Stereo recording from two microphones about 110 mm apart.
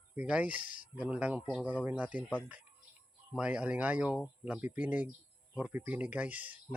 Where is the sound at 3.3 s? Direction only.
10° right (ahead or behind).